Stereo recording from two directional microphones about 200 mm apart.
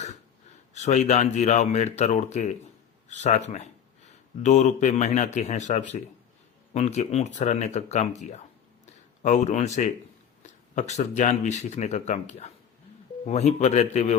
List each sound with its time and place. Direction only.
0.7 s speech: 35° left (ahead or behind)